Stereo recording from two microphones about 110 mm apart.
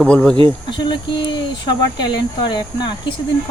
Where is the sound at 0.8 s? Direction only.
45° left (ahead or behind).